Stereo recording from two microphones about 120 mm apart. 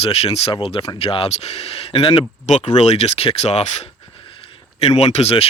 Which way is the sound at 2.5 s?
75° left (ahead or behind).